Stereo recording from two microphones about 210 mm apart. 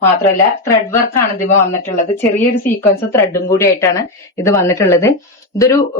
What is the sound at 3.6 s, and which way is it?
Speech, 15° left (ahead or behind).